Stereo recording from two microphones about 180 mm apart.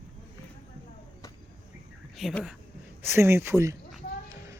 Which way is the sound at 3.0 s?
15° right (ahead or behind).